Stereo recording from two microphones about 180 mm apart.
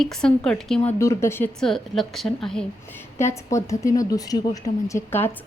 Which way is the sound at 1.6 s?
Centre (ahead or behind).